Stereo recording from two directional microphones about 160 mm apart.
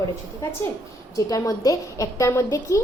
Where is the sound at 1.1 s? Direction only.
20° left (ahead or behind).